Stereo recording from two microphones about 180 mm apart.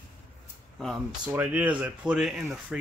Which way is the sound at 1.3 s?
10° right (ahead or behind).